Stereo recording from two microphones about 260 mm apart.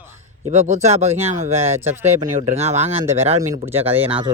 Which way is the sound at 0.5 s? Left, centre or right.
Right.